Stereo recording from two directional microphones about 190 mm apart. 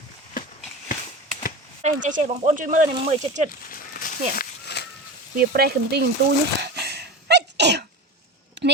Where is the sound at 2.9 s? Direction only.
30° right (ahead or behind).